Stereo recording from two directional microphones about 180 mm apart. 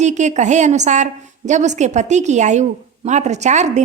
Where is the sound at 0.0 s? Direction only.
40° right (ahead or behind).